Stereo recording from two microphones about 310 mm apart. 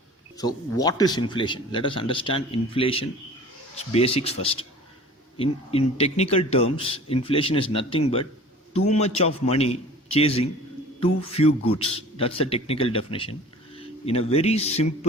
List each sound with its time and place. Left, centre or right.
0.3 s a man's voice: centre